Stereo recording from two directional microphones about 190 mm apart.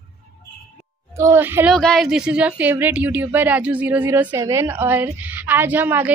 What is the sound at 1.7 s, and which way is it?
A woman's voice, centre (ahead or behind).